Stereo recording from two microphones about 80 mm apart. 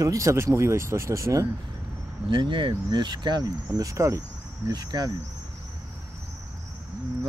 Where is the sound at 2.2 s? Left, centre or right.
Right.